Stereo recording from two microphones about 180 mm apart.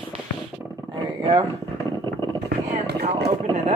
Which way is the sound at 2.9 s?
65° right (ahead or behind).